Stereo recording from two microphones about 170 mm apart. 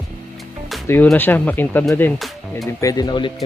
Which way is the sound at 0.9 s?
10° left (ahead or behind).